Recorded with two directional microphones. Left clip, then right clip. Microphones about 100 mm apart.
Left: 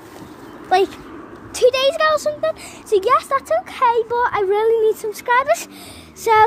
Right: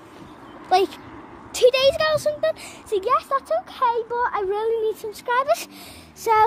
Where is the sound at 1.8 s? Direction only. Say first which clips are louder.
Left 3 dB; 25° right (ahead or behind).